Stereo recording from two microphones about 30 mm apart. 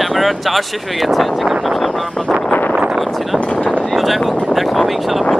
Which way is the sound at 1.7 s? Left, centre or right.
Centre.